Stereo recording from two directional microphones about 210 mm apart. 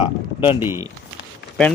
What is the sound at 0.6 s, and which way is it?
Speech, 10° right (ahead or behind).